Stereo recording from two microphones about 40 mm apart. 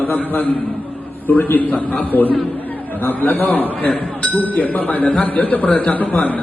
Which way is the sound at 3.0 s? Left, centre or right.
Left.